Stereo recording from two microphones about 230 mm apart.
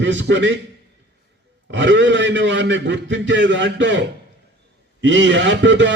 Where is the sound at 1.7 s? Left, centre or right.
Right.